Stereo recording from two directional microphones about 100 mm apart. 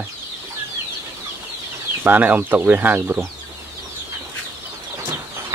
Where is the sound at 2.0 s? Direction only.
15° right (ahead or behind).